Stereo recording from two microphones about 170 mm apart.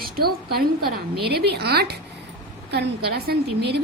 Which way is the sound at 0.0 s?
65° right (ahead or behind).